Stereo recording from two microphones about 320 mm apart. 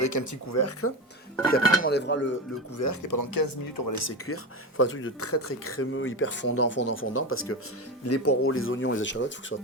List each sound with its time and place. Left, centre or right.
0.0 s speech: left
1.8 s speech: left
2.7 s speech: left
4.0 s speech: left
4.8 s speech: left